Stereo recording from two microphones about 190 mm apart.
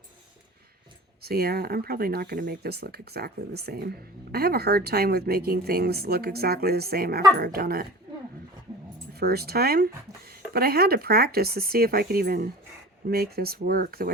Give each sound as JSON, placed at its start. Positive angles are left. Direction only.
{"t": 1.2, "sound": "speech", "side_deg": -55}
{"t": 9.1, "sound": "speech", "side_deg": -55}